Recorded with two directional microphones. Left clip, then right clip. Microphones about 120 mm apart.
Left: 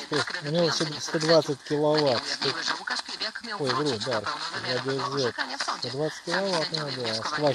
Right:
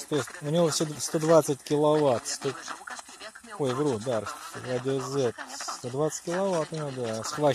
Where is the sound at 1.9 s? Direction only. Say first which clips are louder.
Even; 20° left (ahead or behind).